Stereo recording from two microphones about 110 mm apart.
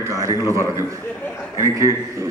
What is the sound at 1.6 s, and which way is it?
Speech, 30° right (ahead or behind).